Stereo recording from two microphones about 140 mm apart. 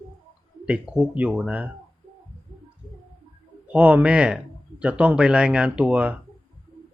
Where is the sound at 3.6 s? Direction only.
10° right (ahead or behind).